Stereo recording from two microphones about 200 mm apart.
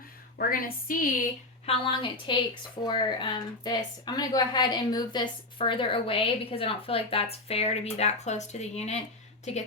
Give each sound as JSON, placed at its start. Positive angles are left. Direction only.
{"t": 0.3, "sound": "a woman's voice", "side_deg": 45}
{"t": 1.6, "sound": "speech", "side_deg": 25}